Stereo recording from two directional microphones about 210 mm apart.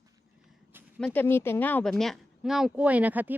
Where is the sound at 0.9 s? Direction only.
5° left (ahead or behind).